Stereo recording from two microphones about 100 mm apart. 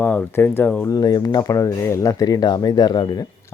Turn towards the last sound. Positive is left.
turn(degrees=45)  # may be behind; listen again after turning